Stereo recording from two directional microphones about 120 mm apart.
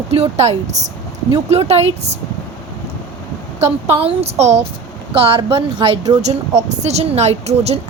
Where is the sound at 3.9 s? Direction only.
55° right (ahead or behind).